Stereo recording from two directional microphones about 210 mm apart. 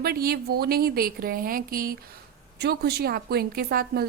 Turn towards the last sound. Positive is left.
turn(degrees=-45)  # may be behind; listen again after turning